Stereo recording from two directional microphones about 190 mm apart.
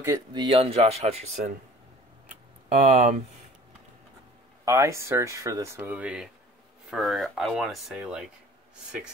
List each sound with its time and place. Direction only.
0.0 s speech: 20° right (ahead or behind)
2.8 s speech: 35° right (ahead or behind)
4.6 s speech: 15° right (ahead or behind)